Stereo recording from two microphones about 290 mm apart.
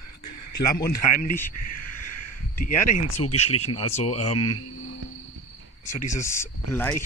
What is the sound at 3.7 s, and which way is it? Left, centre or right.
Speech, left.